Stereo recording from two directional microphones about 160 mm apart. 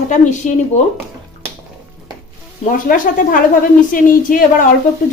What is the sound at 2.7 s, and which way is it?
Speech, 60° left (ahead or behind).